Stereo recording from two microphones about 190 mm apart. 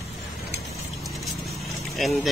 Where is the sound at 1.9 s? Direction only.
Centre (ahead or behind).